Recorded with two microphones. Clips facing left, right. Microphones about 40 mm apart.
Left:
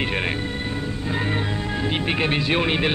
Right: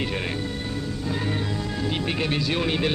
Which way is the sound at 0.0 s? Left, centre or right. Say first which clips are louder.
Left 4 dB; left.